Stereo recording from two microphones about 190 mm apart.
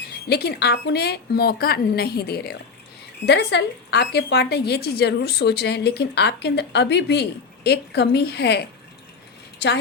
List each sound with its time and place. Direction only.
0.3 s a woman's voice: 55° left (ahead or behind)